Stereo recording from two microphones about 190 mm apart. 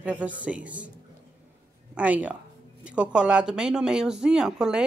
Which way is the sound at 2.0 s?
5° right (ahead or behind).